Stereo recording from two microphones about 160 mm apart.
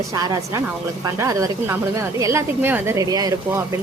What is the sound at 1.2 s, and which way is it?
A woman's voice, 20° right (ahead or behind).